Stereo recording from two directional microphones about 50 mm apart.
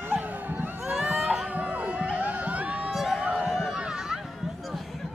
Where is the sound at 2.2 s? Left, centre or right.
Right.